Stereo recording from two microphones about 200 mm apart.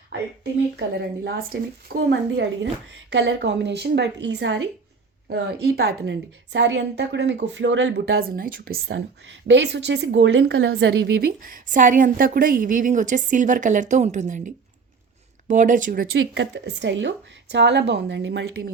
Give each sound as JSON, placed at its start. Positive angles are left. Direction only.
{"t": 0.8, "sound": "a woman's voice", "side_deg": -55}
{"t": 9.5, "sound": "a woman's voice", "side_deg": -60}
{"t": 11.4, "sound": "a woman's voice", "side_deg": -40}
{"t": 16.1, "sound": "a woman's voice", "side_deg": -65}